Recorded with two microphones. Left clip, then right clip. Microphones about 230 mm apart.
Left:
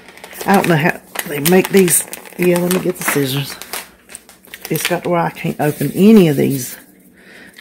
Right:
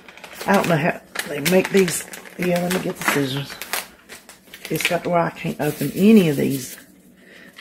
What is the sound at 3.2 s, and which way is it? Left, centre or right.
Speech, left.